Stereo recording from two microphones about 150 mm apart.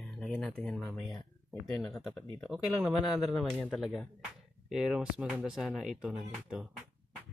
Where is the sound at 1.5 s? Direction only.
20° left (ahead or behind).